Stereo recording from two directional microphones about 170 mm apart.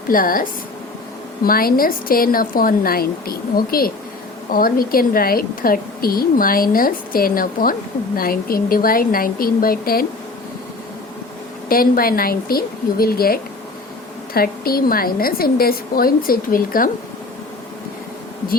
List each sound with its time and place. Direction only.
0.1 s a woman's voice: 55° left (ahead or behind)
1.5 s a woman's voice: 60° left (ahead or behind)
11.7 s a woman's voice: 60° left (ahead or behind)